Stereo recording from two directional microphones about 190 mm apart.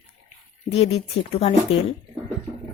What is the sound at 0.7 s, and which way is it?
Speech, 30° left (ahead or behind).